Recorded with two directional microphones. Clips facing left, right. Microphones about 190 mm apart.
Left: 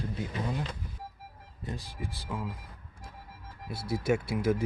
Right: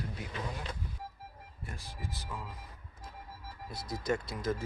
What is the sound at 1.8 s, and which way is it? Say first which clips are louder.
Speech: left 4 dB; 15° left (ahead or behind).